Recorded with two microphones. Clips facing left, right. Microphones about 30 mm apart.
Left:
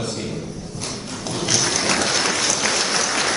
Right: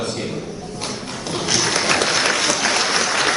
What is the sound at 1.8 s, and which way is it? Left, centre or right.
Applause, centre.